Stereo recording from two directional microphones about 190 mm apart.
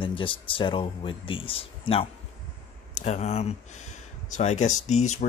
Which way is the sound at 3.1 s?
35° left (ahead or behind).